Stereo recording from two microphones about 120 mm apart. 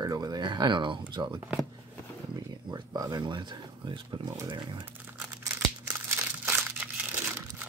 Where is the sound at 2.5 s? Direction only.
35° right (ahead or behind).